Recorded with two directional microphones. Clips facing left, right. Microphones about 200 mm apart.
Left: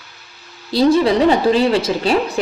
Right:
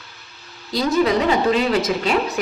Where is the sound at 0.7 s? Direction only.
30° left (ahead or behind).